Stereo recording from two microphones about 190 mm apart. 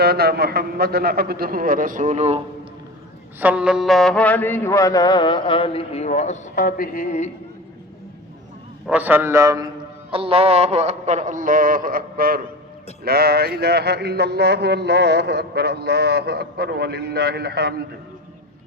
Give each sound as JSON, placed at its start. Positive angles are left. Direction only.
{"t": 0.0, "sound": "a man's voice", "side_deg": -55}
{"t": 3.4, "sound": "mantra", "side_deg": -5}
{"t": 8.9, "sound": "a man's voice", "side_deg": -10}
{"t": 10.1, "sound": "a sound", "side_deg": -30}